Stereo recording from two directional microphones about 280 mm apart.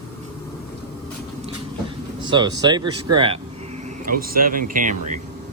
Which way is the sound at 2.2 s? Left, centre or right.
Centre.